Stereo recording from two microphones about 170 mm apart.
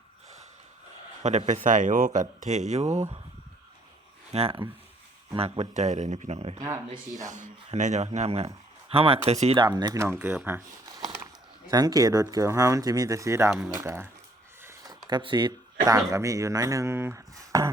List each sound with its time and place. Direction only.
1.2 s speech: 45° right (ahead or behind)
4.3 s speech: 35° right (ahead or behind)
6.6 s speech: 20° right (ahead or behind)
7.3 s speech: 45° right (ahead or behind)
9.6 s speech: 25° right (ahead or behind)